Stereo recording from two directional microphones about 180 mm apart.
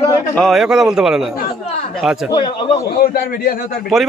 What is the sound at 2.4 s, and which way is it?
Speech, 25° left (ahead or behind).